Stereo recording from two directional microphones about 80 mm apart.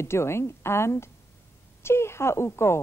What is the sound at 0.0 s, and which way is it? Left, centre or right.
A woman's voice, left.